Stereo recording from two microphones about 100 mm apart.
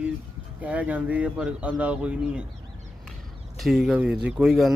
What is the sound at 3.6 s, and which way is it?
Speech, 5° right (ahead or behind).